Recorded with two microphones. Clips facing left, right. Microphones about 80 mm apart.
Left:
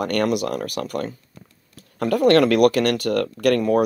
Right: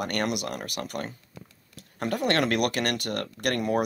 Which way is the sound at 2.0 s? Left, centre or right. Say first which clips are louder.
Left 10 dB; left.